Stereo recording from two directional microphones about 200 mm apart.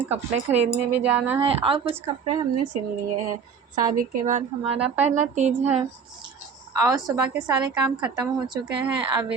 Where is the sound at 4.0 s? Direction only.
40° right (ahead or behind).